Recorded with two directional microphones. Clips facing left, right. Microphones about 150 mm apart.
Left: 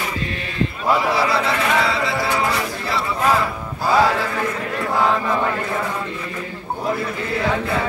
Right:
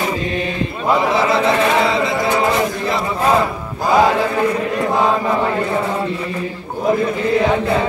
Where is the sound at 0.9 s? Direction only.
20° right (ahead or behind).